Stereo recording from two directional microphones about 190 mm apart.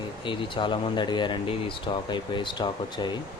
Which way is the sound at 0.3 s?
25° left (ahead or behind).